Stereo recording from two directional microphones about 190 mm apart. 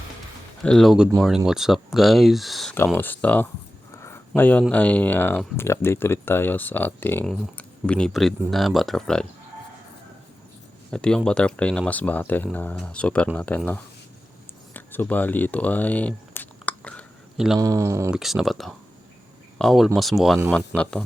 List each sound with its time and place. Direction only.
0.6 s speech: 5° left (ahead or behind)
3.9 s a sound: 15° left (ahead or behind)
4.7 s speech: 10° left (ahead or behind)
10.9 s speech: 5° left (ahead or behind)
14.7 s a sound: 10° left (ahead or behind)
17.6 s speech: 15° right (ahead or behind)
18.1 s speech: centre (ahead or behind)